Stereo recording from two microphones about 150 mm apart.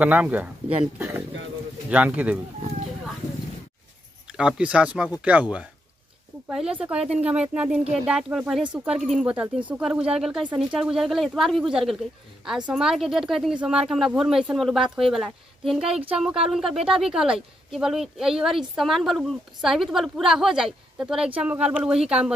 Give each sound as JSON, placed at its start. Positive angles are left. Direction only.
{"t": 0.0, "sound": "speech", "side_deg": -10}
{"t": 1.9, "sound": "speech", "side_deg": -10}
{"t": 4.3, "sound": "speech", "side_deg": -5}